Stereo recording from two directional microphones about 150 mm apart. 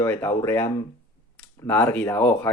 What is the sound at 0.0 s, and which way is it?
Speech, 15° left (ahead or behind).